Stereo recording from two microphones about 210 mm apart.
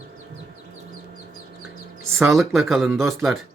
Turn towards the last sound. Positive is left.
turn(degrees=0)  # may be behind; listen again after turning